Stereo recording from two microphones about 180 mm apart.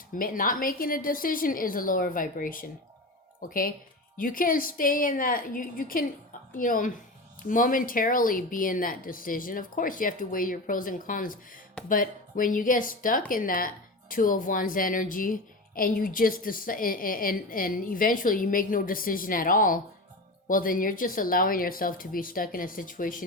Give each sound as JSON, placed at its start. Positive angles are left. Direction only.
{"t": 0.2, "sound": "a woman's voice", "side_deg": 50}